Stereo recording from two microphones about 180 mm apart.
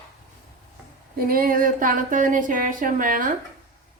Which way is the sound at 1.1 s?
55° right (ahead or behind).